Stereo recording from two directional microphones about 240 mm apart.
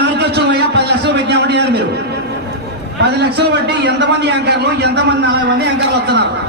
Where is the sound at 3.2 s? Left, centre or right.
Right.